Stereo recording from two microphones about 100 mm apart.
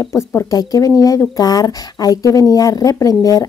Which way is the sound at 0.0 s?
30° left (ahead or behind).